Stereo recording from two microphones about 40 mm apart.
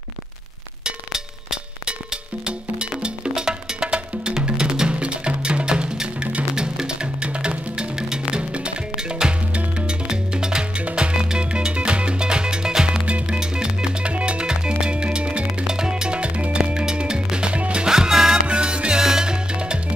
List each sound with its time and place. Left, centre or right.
0.8 s music: centre
8.9 s music: centre
9.5 s music: right
13.0 s music: right
13.4 s music: centre
15.6 s music: centre
17.8 s music: centre
18.5 s music: right